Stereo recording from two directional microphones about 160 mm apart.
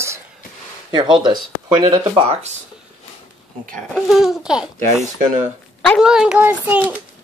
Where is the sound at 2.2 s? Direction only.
40° right (ahead or behind).